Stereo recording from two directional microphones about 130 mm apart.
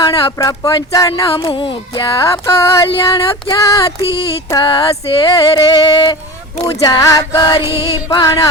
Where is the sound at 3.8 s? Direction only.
45° left (ahead or behind).